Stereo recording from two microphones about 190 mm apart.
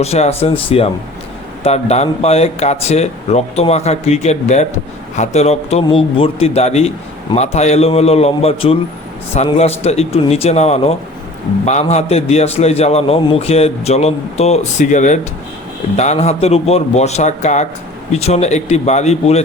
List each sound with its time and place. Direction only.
0.0 s a man's voice: 35° left (ahead or behind)
1.6 s a man's voice: 35° left (ahead or behind)